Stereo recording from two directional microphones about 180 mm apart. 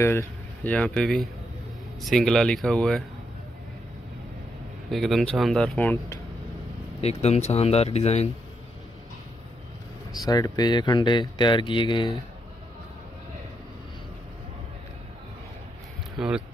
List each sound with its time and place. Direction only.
0.7 s speech: 5° left (ahead or behind)
4.9 s speech: centre (ahead or behind)
7.0 s speech: 35° left (ahead or behind)
10.1 s speech: 20° left (ahead or behind)
16.2 s speech: 5° right (ahead or behind)